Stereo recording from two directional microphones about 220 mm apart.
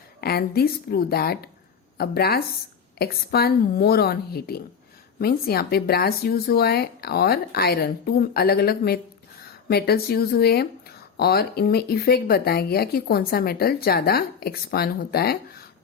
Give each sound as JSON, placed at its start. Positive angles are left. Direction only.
{"t": 0.2, "sound": "speech", "side_deg": 45}